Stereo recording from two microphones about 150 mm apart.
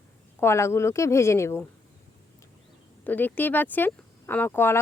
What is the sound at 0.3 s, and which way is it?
Speech, 15° left (ahead or behind).